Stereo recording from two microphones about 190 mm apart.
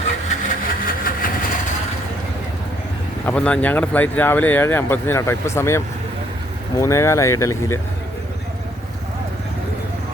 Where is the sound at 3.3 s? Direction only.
5° left (ahead or behind).